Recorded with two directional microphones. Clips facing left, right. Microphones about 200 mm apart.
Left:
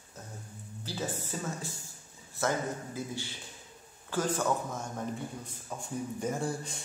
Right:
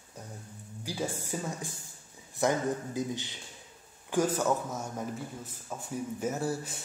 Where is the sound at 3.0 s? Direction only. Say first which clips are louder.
Right 4 dB; 20° right (ahead or behind).